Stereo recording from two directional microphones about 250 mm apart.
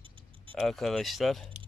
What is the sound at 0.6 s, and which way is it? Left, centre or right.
Speech, centre.